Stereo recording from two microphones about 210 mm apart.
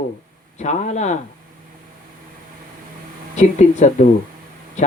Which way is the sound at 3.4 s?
35° left (ahead or behind).